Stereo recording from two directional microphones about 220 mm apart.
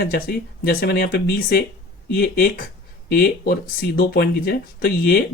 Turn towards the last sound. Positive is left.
turn(degrees=45)  # may be behind; listen again after turning